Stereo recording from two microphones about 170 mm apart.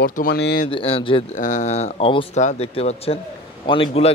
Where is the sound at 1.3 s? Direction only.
45° left (ahead or behind).